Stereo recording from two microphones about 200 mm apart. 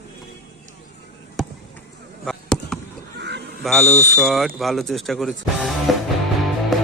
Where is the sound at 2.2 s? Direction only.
Centre (ahead or behind).